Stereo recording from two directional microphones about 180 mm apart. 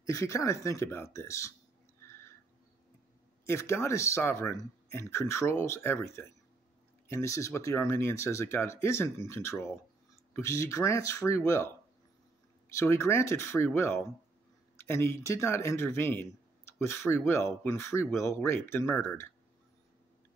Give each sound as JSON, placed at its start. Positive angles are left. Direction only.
{"t": 0.0, "sound": "speech", "side_deg": 20}
{"t": 2.0, "sound": "a sound", "side_deg": 15}
{"t": 3.4, "sound": "speech", "side_deg": 15}
{"t": 12.7, "sound": "speech", "side_deg": 15}